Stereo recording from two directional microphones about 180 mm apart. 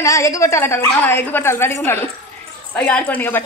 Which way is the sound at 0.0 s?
15° left (ahead or behind).